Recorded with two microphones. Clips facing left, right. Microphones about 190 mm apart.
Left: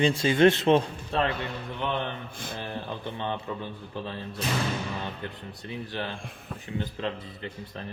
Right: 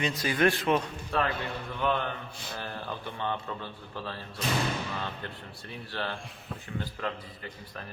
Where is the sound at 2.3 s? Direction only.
50° left (ahead or behind).